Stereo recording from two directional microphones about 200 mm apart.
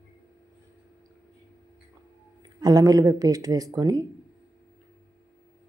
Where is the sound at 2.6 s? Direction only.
15° right (ahead or behind).